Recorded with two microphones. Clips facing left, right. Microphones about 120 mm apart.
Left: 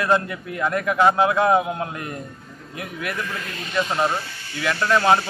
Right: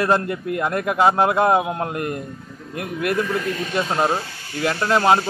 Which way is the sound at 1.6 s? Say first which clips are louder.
Right 1 dB; 30° right (ahead or behind).